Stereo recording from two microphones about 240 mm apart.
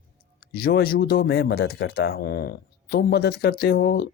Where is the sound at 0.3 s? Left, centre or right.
Left.